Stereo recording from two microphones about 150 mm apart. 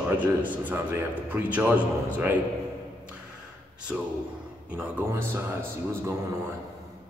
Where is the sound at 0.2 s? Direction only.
10° right (ahead or behind).